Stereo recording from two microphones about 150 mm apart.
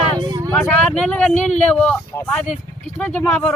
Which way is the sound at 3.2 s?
10° left (ahead or behind).